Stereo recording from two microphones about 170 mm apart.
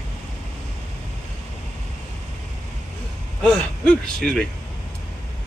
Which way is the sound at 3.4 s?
5° left (ahead or behind).